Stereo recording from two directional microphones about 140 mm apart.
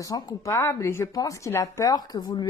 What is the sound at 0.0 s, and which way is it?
Speech, 25° left (ahead or behind).